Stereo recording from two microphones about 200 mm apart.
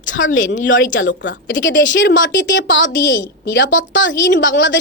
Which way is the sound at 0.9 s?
65° left (ahead or behind).